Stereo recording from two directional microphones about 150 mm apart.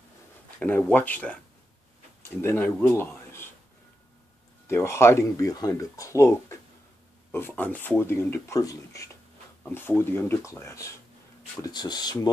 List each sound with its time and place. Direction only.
0.6 s speech: 10° left (ahead or behind)
4.6 s speech: 15° left (ahead or behind)